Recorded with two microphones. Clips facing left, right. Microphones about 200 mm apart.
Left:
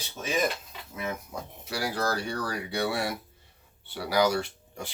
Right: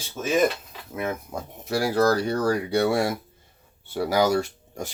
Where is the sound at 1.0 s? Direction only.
55° right (ahead or behind).